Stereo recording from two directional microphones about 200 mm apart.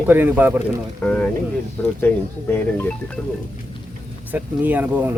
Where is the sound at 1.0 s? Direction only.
5° left (ahead or behind).